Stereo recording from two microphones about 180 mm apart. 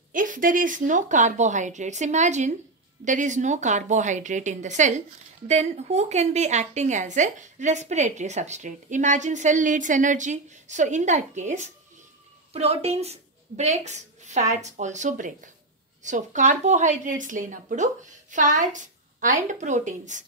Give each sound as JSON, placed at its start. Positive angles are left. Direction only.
{"t": 0.1, "sound": "a woman's voice", "side_deg": -50}